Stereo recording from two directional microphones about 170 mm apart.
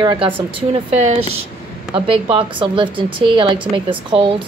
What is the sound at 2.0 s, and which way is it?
A woman's voice, 30° right (ahead or behind).